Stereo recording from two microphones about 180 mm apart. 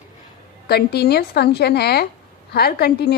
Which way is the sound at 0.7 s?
60° left (ahead or behind).